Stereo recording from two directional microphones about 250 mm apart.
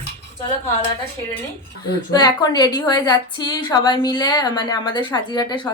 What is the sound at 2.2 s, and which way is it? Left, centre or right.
A woman's voice, centre.